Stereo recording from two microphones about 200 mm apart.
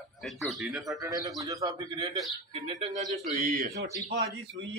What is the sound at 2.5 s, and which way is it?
A man's voice, 35° right (ahead or behind).